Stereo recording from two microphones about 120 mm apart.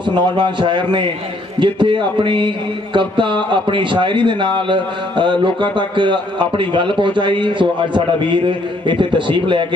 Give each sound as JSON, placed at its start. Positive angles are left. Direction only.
{"t": 0.1, "sound": "speech", "side_deg": -40}